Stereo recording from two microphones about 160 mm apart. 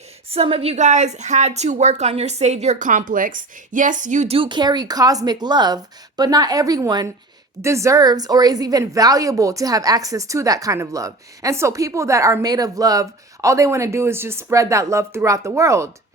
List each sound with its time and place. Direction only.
0.3 s a woman's voice: 35° right (ahead or behind)
4.4 s speech: 30° right (ahead or behind)